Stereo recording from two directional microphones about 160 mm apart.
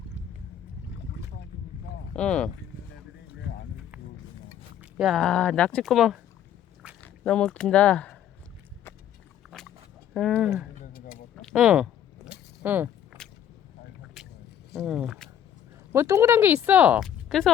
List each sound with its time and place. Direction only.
0.9 s boat: 90° left
2.1 s speech: 5° left (ahead or behind)
4.8 s speech: 5° right (ahead or behind)
9.5 s dog: centre (ahead or behind)
10.2 s speech: centre (ahead or behind)
10.9 s a sound: 65° left (ahead or behind)
11.4 s a sound: 5° right (ahead or behind)
13.2 s vehicle: 5° left (ahead or behind)
14.8 s speech: centre (ahead or behind)
15.9 s speech: 15° right (ahead or behind)
17.0 s speech: centre (ahead or behind)